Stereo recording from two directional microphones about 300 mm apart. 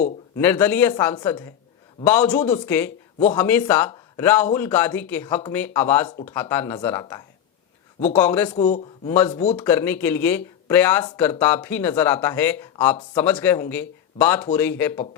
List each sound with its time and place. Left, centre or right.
0.3 s speech: centre
8.5 s a man's voice: left
9.0 s speech: centre
9.3 s a man's voice: left
9.6 s speech: centre